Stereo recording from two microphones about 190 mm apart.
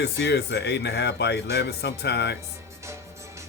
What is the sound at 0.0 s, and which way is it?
Speech, 60° left (ahead or behind).